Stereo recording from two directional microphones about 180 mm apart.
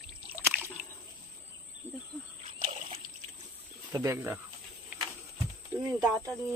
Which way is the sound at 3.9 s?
15° right (ahead or behind).